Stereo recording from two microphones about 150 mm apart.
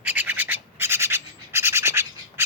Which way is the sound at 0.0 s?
10° right (ahead or behind).